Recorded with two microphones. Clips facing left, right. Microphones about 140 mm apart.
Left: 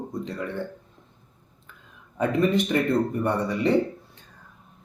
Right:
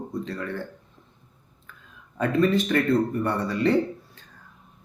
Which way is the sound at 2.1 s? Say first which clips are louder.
Even; 15° left (ahead or behind).